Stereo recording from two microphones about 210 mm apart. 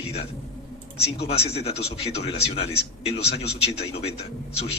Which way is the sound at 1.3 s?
30° left (ahead or behind).